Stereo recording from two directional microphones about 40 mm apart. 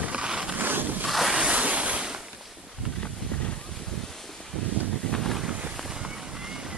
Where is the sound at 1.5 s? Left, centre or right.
Right.